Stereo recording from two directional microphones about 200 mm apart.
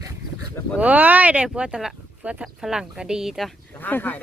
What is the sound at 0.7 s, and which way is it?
Speech, 10° right (ahead or behind).